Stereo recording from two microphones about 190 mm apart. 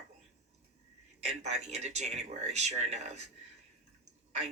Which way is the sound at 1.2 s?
35° right (ahead or behind).